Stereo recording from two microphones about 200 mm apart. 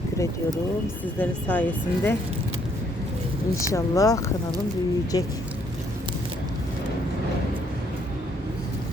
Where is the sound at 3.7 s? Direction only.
15° left (ahead or behind).